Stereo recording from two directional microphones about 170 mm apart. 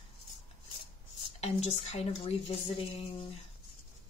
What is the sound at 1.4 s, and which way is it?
A woman's voice, 40° left (ahead or behind).